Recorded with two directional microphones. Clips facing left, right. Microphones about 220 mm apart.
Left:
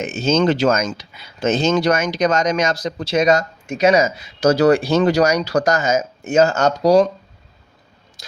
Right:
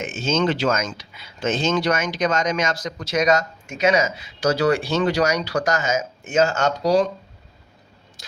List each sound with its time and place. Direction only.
0.0 s speech: 40° left (ahead or behind)